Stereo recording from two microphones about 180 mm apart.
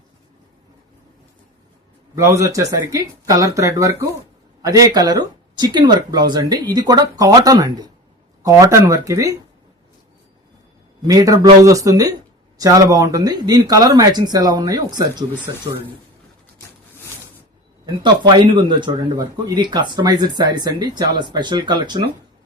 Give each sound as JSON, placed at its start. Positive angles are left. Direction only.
{"t": 2.1, "sound": "speech", "side_deg": -15}
{"t": 11.0, "sound": "speech", "side_deg": -20}
{"t": 18.0, "sound": "speech", "side_deg": -25}